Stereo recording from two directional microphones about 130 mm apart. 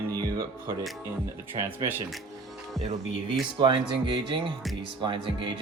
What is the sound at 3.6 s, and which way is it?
Speech, 40° right (ahead or behind).